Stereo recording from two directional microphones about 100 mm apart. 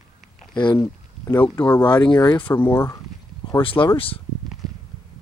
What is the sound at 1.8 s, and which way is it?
Speech, 50° left (ahead or behind).